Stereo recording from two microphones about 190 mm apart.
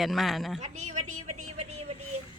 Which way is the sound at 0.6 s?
40° right (ahead or behind).